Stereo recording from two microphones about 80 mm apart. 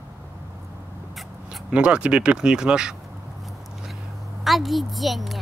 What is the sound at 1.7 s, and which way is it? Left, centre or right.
Speech, centre.